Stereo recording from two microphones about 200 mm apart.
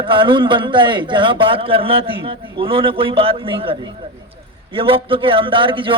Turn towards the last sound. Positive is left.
turn(degrees=-25)  # may be behind; listen again after turning